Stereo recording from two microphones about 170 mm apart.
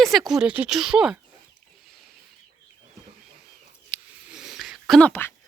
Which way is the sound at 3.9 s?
5° right (ahead or behind).